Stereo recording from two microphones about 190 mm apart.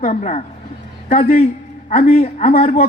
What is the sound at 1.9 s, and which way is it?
Speech, 35° left (ahead or behind).